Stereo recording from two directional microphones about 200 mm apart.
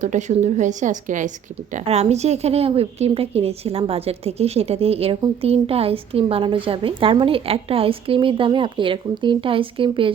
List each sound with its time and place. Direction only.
0.0 s a woman's voice: 40° right (ahead or behind)